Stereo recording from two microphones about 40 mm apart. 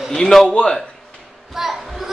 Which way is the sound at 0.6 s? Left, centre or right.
Centre.